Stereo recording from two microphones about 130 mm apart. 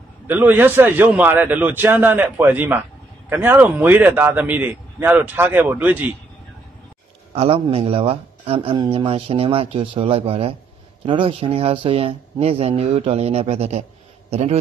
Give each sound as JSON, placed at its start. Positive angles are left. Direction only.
{"t": 0.3, "sound": "a man's voice", "side_deg": -15}
{"t": 7.3, "sound": "a man's voice", "side_deg": -45}